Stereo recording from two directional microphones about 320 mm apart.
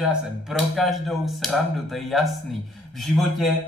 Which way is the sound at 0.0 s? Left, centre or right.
Centre.